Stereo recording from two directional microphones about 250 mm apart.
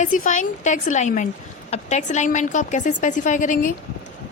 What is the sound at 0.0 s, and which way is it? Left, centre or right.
A woman's voice, left.